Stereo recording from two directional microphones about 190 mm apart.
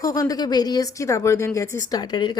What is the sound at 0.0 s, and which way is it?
A woman's voice, 20° left (ahead or behind).